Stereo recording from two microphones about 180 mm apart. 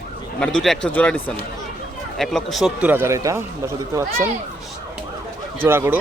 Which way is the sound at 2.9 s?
15° right (ahead or behind).